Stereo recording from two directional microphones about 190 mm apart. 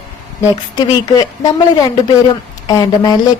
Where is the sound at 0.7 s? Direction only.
20° left (ahead or behind).